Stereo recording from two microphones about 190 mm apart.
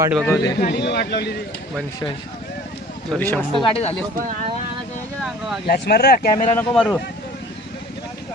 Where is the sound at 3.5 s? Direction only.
25° left (ahead or behind).